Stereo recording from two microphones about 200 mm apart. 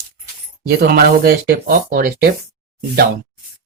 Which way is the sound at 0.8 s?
50° right (ahead or behind).